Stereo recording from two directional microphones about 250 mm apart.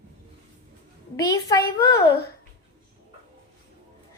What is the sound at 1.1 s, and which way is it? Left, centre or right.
A woman's voice, centre.